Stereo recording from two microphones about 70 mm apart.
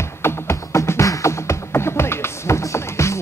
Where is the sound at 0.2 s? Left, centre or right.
Left.